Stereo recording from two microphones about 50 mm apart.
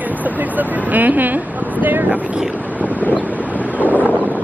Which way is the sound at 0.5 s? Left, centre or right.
Right.